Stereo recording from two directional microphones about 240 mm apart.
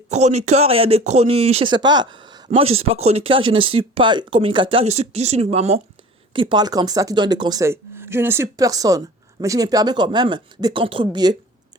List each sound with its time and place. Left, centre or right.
0.1 s speech: right